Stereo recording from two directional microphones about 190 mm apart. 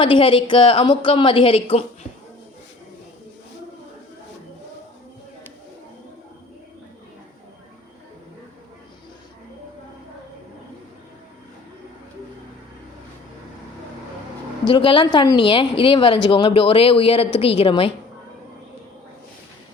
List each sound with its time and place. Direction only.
0.0 s speech: 25° left (ahead or behind)
14.7 s speech: 25° left (ahead or behind)